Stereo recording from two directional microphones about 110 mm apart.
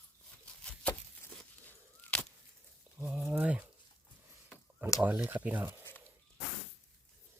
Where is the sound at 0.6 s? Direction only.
10° left (ahead or behind).